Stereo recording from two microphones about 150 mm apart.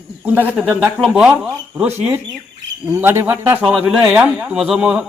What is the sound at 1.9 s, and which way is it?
A man's voice, 15° right (ahead or behind).